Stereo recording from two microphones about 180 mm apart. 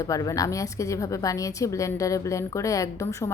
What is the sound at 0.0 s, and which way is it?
A woman's voice, 20° left (ahead or behind).